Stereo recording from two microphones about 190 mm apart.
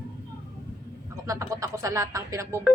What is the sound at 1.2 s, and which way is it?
Speech, 15° right (ahead or behind).